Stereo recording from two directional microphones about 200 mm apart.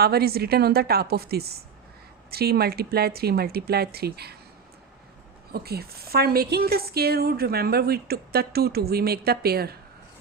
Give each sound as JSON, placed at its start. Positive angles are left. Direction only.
{"t": 0.0, "sound": "a woman's voice", "side_deg": -50}
{"t": 5.5, "sound": "a woman's voice", "side_deg": -50}